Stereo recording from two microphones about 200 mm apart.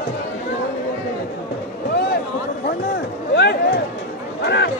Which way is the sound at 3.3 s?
55° left (ahead or behind).